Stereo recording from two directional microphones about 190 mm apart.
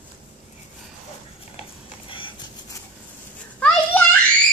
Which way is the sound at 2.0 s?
25° left (ahead or behind).